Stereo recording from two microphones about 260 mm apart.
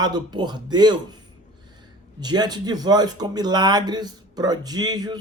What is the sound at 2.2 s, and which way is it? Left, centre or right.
Speech, centre.